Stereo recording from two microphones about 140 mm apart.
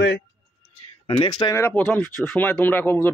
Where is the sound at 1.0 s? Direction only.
35° left (ahead or behind).